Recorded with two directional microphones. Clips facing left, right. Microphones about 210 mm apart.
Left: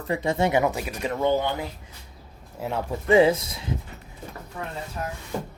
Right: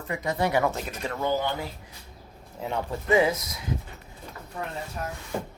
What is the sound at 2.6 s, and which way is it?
Speech, 5° left (ahead or behind).